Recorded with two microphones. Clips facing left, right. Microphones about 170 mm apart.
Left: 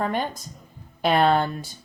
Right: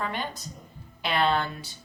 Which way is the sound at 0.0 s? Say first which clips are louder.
Left 6 dB; 45° left (ahead or behind).